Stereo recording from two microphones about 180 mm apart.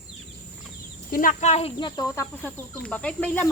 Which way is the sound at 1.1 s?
50° left (ahead or behind).